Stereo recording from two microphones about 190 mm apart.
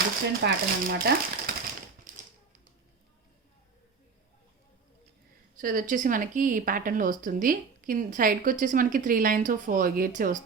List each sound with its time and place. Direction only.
0.4 s speech: 55° right (ahead or behind)
2.1 s typewriter: 45° right (ahead or behind)
5.5 s speech: 45° right (ahead or behind)